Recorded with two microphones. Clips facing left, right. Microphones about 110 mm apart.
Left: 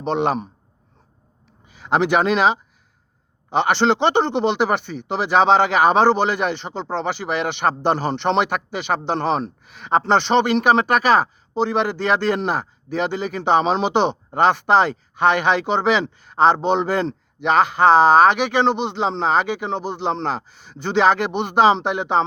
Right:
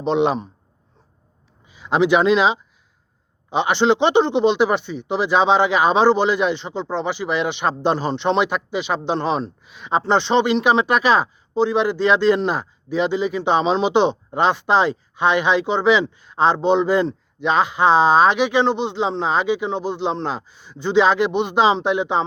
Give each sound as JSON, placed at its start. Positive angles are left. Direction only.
{"t": 0.0, "sound": "speech", "side_deg": 50}
{"t": 1.6, "sound": "speech", "side_deg": 50}